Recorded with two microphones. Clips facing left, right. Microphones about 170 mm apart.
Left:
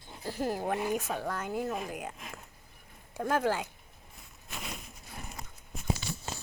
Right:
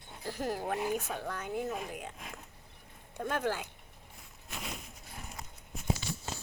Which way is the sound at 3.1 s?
5° left (ahead or behind).